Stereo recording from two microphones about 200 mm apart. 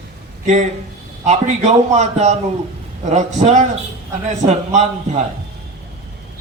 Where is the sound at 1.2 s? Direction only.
35° right (ahead or behind).